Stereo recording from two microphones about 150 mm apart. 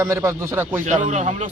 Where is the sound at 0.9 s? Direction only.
50° right (ahead or behind).